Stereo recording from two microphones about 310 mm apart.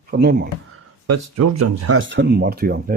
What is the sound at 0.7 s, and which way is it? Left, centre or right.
Speech, right.